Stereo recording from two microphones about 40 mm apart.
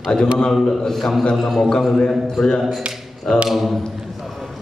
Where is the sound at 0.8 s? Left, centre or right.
Centre.